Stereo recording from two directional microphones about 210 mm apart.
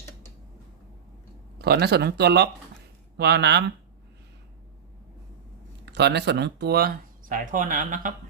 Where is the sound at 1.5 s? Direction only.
50° right (ahead or behind).